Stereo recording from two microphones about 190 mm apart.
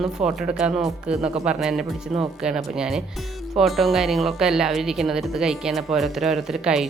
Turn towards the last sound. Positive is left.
turn(degrees=-5)  # may be behind; listen again after turning